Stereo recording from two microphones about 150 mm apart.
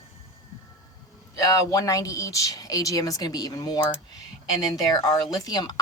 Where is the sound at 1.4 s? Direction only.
20° left (ahead or behind).